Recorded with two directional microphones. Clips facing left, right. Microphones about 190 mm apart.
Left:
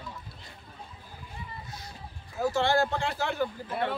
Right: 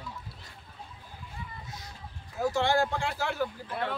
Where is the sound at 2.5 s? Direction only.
15° right (ahead or behind).